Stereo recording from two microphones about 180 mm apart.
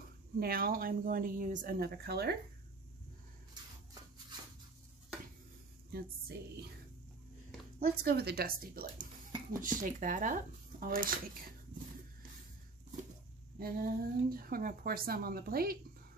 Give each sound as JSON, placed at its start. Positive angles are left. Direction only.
{"t": 0.4, "sound": "speech", "side_deg": -55}
{"t": 5.9, "sound": "speech", "side_deg": -60}
{"t": 7.8, "sound": "speech", "side_deg": -60}
{"t": 13.6, "sound": "speech", "side_deg": -55}